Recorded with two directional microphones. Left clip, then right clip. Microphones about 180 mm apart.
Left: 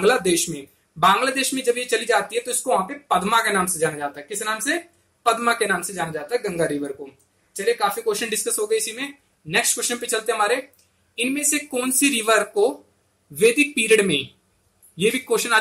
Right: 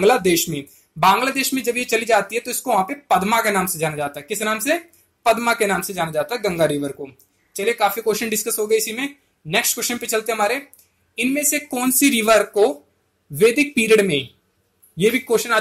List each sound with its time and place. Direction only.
0.0 s speech: 25° right (ahead or behind)
5.2 s a man's voice: 30° right (ahead or behind)